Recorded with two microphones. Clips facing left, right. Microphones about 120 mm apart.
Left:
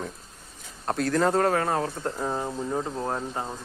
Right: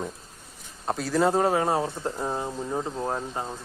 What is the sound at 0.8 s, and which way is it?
Speech, 5° right (ahead or behind).